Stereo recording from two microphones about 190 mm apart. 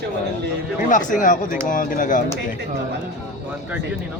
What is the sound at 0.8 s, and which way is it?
Speech, 45° left (ahead or behind).